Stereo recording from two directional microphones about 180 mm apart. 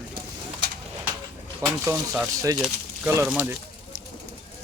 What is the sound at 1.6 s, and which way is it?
Speech, 15° right (ahead or behind).